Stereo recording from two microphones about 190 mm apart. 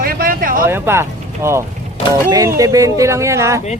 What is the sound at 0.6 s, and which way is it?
Speech, 10° right (ahead or behind).